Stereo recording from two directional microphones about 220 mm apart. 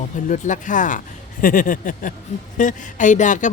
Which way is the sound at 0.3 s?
35° left (ahead or behind).